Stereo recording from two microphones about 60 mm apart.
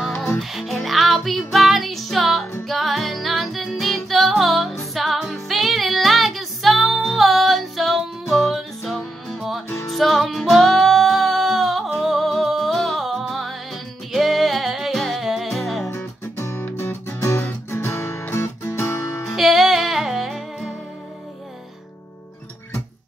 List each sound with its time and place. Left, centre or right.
0.0 s music: centre
16.5 s music: left
19.2 s music: centre